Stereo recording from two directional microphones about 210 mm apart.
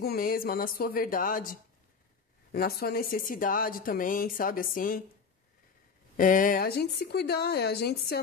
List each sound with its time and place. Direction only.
0.0 s a woman's voice: 45° left (ahead or behind)
6.1 s a woman's voice: 40° left (ahead or behind)